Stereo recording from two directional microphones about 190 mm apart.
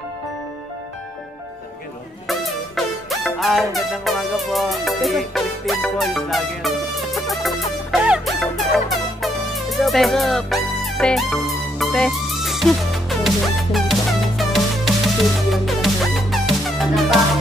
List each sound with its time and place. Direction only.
2.2 s music: centre (ahead or behind)